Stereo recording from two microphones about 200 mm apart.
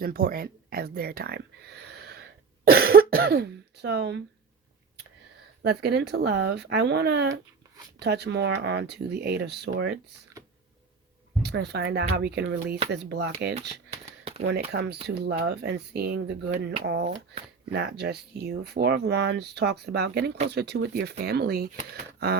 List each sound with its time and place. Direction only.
0.0 s speech: 45° right (ahead or behind)
5.6 s speech: 55° right (ahead or behind)
11.4 s speech: 55° right (ahead or behind)
13.5 s a sound: 30° right (ahead or behind)
14.7 s speech: 55° right (ahead or behind)